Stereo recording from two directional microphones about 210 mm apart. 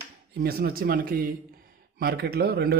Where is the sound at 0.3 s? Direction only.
45° right (ahead or behind).